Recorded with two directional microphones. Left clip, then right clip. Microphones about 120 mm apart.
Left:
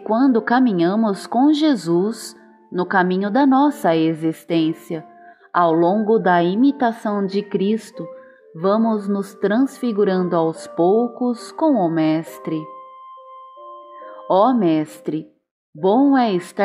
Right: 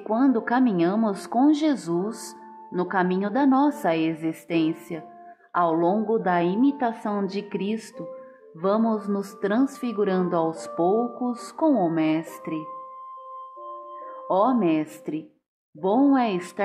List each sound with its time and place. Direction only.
0.0 s a woman's voice: 40° left (ahead or behind)
2.9 s a woman's voice: 45° left (ahead or behind)
6.5 s a woman's voice: 5° right (ahead or behind)
6.8 s a woman's voice: 40° left (ahead or behind)
14.2 s a woman's voice: 35° left (ahead or behind)